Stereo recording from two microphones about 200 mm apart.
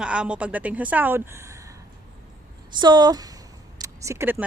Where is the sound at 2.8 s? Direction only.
20° right (ahead or behind).